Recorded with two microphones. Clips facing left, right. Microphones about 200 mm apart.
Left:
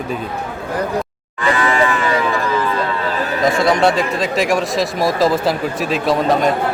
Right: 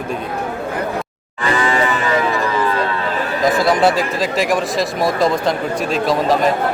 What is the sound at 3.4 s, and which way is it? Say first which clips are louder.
Speech: even; centre (ahead or behind).